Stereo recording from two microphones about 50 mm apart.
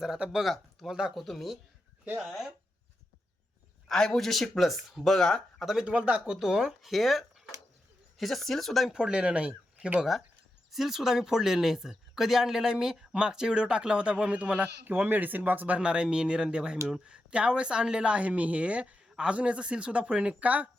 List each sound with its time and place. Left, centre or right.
0.3 s speech: centre
0.9 s speech: centre
1.1 s speech: centre
3.8 s speech: centre
5.8 s speech: centre
8.9 s a woman's voice: centre
10.7 s speech: centre; by 14.7 s right
14.8 s speech: right
15.8 s a woman's voice: centre